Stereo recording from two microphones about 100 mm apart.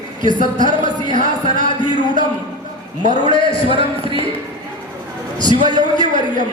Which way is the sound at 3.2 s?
55° left (ahead or behind).